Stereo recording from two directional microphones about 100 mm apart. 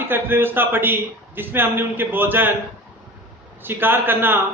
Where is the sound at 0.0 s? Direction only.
20° right (ahead or behind).